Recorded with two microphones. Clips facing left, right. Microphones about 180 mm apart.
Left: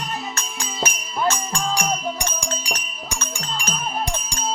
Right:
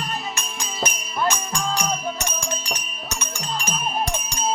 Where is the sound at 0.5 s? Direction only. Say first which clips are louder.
Left 2 dB; 10° left (ahead or behind).